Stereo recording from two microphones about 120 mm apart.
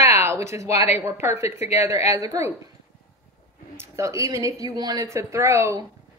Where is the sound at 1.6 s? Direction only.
65° left (ahead or behind).